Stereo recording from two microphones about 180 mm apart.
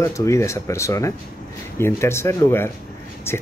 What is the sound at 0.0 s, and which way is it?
A man's voice, 15° left (ahead or behind).